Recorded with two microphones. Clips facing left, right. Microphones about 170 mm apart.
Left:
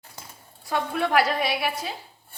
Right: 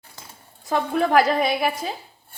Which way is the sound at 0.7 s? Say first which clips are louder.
Right 4 dB; 40° right (ahead or behind).